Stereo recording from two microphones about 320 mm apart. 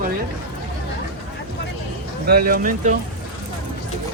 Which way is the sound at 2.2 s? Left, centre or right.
Right.